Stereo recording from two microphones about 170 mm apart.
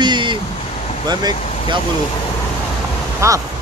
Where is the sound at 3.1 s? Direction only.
20° right (ahead or behind).